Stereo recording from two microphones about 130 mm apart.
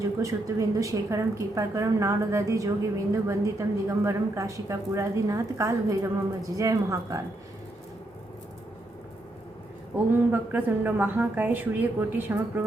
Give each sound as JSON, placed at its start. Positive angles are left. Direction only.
{"t": 0.0, "sound": "a woman's voice", "side_deg": -25}
{"t": 9.9, "sound": "speech", "side_deg": -15}